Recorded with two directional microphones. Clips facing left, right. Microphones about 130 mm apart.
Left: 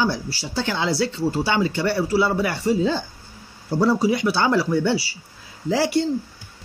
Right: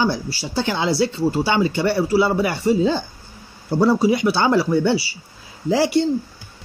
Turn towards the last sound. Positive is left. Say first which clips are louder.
# right 3 dB
turn(degrees=-20)  # may be behind; listen again after turning